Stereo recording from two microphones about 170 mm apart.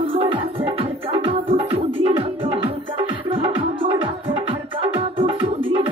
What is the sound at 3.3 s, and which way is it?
Music, 30° right (ahead or behind).